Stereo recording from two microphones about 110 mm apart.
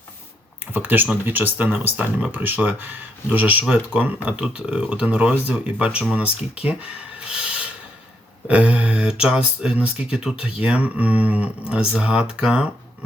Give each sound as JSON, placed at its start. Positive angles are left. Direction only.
{"t": 0.7, "sound": "speech", "side_deg": -20}
{"t": 7.2, "sound": "a sound", "side_deg": -10}
{"t": 8.4, "sound": "speech", "side_deg": -10}